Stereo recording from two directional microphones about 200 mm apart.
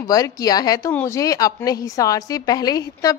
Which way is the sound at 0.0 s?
15° left (ahead or behind).